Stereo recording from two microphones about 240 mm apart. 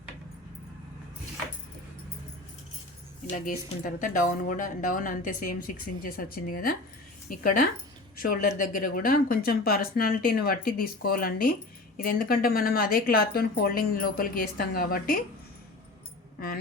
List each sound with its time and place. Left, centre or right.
3.8 s speech: left